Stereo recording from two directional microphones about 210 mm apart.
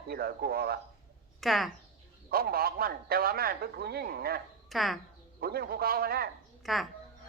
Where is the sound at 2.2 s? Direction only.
45° right (ahead or behind).